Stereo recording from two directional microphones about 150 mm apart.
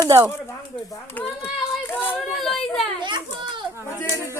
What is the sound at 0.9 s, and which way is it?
Speech, 15° left (ahead or behind).